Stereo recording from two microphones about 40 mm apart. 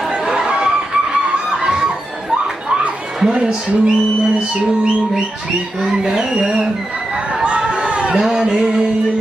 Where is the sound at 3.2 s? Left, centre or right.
Centre.